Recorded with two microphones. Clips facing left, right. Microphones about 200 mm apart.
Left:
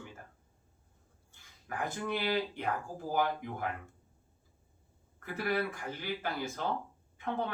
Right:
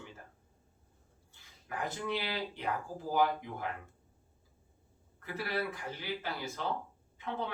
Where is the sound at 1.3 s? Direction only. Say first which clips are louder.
Left 1 dB; 50° left (ahead or behind).